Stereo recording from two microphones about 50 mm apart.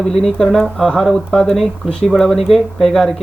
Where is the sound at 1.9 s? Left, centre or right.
Centre.